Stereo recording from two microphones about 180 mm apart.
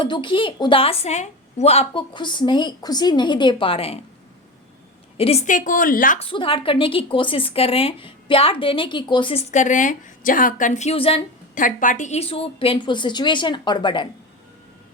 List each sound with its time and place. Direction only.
0.0 s a woman's voice: 25° left (ahead or behind)
5.1 s a woman's voice: 35° left (ahead or behind); by 6.1 s 50° left (ahead or behind)
6.1 s a woman's voice: 30° left (ahead or behind)
11.5 s a woman's voice: 45° left (ahead or behind); by 14.1 s 25° left (ahead or behind)